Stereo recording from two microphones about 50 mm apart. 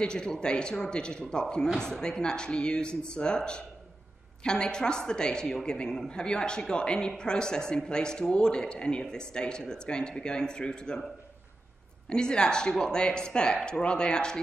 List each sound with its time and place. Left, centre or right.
0.0 s speech: centre
12.1 s speech: centre